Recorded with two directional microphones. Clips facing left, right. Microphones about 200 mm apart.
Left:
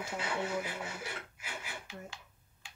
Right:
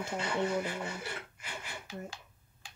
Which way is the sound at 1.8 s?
40° right (ahead or behind).